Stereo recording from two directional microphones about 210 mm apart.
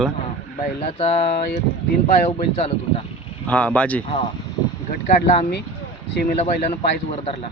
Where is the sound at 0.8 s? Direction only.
30° left (ahead or behind).